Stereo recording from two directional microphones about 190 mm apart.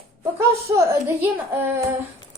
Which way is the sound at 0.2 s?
15° right (ahead or behind).